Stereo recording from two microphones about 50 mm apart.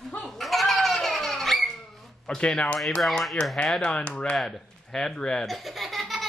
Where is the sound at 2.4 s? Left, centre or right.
Left.